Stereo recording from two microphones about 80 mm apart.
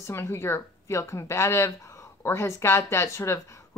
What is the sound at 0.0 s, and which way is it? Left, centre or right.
Speech, left.